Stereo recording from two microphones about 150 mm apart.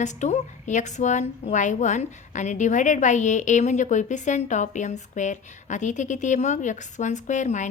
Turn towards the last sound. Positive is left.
turn(degrees=55)  # may be behind; listen again after turning